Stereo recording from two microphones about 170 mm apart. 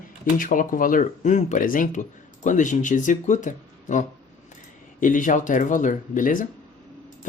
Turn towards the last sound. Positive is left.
turn(degrees=50)  # may be behind; listen again after turning